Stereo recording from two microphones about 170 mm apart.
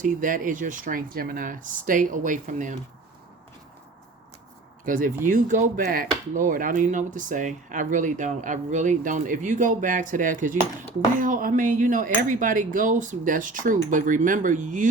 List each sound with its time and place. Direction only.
0.0 s speech: 50° right (ahead or behind)
4.9 s speech: 50° right (ahead or behind)